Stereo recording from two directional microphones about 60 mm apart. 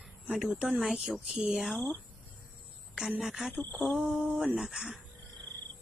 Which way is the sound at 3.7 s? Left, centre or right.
Centre.